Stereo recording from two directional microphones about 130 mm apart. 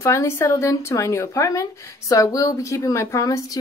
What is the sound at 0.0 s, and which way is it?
A woman's voice, 20° left (ahead or behind).